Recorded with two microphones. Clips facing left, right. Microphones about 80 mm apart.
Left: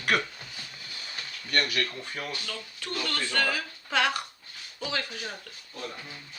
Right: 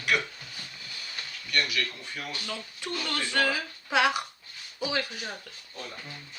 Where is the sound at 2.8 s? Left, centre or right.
Centre.